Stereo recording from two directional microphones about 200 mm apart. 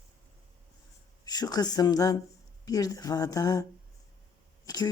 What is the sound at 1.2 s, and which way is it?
Speech, 20° left (ahead or behind).